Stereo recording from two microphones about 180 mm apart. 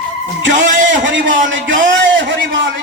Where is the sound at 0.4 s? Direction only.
90° right.